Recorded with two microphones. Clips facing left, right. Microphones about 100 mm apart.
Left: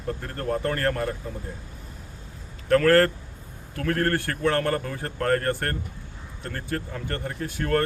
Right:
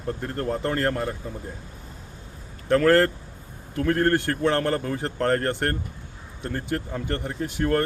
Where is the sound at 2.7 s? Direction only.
20° right (ahead or behind).